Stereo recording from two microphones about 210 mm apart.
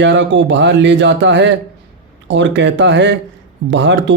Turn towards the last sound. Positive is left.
turn(degrees=-60)  # may be behind; listen again after turning